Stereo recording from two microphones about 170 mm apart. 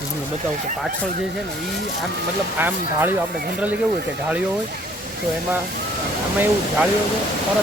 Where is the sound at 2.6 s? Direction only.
10° right (ahead or behind).